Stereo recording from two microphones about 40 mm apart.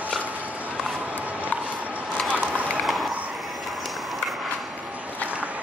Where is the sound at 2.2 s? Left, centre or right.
Right.